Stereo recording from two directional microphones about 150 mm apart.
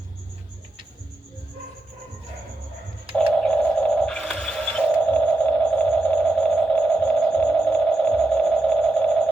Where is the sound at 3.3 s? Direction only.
5° left (ahead or behind).